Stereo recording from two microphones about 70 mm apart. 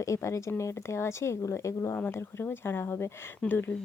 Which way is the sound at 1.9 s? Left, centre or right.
Left.